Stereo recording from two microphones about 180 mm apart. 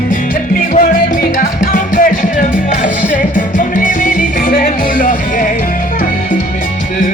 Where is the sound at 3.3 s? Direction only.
45° left (ahead or behind).